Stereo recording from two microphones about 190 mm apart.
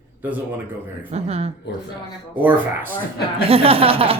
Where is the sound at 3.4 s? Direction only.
30° right (ahead or behind).